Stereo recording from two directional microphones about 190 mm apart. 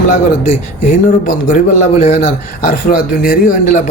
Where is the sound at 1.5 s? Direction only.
40° left (ahead or behind).